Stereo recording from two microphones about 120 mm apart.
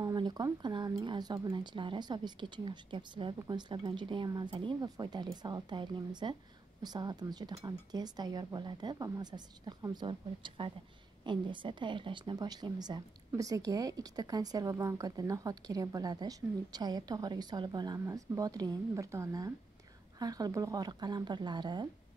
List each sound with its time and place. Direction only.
0.0 s speech: 35° right (ahead or behind)
10.0 s a woman's voice: 45° right (ahead or behind)